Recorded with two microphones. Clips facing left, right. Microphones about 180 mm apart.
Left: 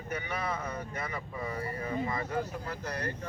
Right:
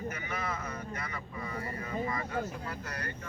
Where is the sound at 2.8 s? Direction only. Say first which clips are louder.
Left 5 dB; 40° left (ahead or behind).